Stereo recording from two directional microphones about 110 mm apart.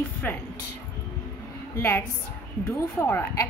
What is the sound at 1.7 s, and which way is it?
A woman's voice, 25° left (ahead or behind).